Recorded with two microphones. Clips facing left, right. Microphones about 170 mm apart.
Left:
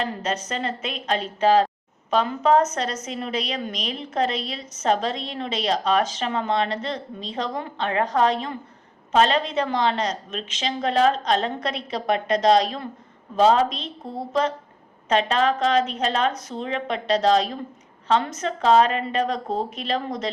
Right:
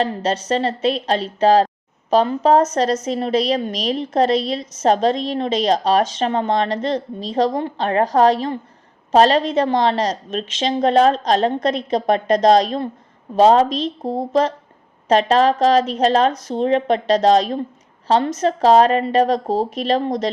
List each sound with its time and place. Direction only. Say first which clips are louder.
0.0 s a woman's voice: right 6 dB; 30° right (ahead or behind)